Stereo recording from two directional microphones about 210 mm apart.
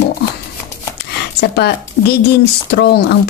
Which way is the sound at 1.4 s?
50° left (ahead or behind).